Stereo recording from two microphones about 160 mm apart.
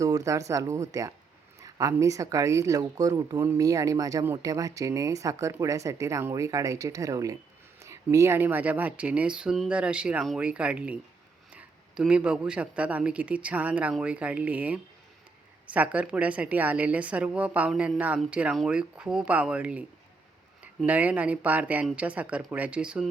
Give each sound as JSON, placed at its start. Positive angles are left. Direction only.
{"t": 0.0, "sound": "a woman's voice", "side_deg": -20}
{"t": 20.8, "sound": "a woman's voice", "side_deg": -10}